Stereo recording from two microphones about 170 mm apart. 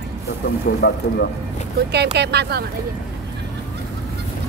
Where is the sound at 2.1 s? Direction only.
75° right (ahead or behind).